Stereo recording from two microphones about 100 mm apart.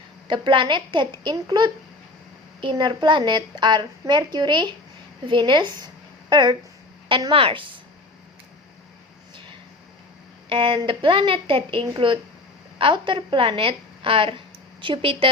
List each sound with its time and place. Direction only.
0.3 s a woman's voice: 55° right (ahead or behind)
7.3 s speech: 65° right (ahead or behind)
10.5 s a woman's voice: 60° right (ahead or behind)